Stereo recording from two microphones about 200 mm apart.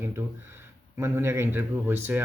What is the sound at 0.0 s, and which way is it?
Speech, 10° right (ahead or behind).